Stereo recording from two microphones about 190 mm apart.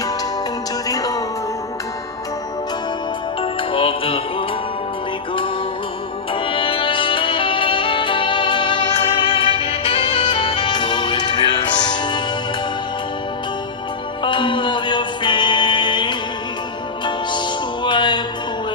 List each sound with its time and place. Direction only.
0.9 s music: 20° left (ahead or behind)
3.4 s music: 30° left (ahead or behind)
6.3 s music: 25° left (ahead or behind)
14.3 s music: 25° left (ahead or behind)
17.8 s music: 25° left (ahead or behind)